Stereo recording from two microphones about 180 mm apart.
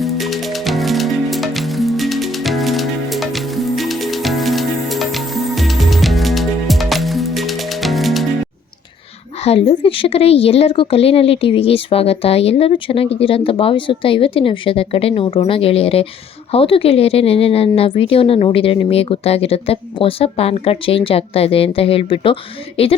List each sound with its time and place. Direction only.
0.0 s music: centre (ahead or behind)
9.4 s a woman's voice: 35° left (ahead or behind)